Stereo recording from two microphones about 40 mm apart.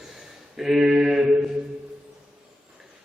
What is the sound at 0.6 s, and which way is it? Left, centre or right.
Mantra, centre.